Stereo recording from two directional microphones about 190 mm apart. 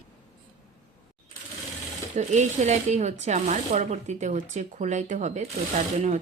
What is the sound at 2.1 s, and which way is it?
Speech, 40° right (ahead or behind).